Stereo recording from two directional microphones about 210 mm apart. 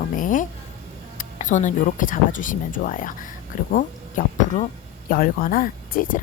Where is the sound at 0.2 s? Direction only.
40° left (ahead or behind).